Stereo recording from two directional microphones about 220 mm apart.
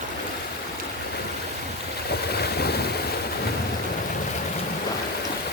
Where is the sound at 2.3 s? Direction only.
45° left (ahead or behind).